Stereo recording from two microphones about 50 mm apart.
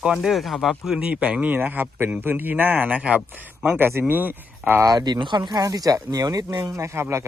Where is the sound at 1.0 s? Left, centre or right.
Right.